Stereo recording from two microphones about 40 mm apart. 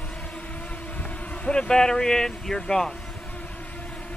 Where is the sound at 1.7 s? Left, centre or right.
Centre.